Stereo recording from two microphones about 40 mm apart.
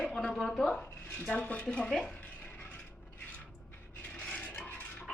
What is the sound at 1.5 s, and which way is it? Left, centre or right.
Speech, left.